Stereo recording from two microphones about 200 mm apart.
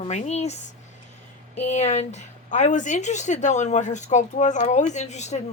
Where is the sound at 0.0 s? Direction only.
35° left (ahead or behind).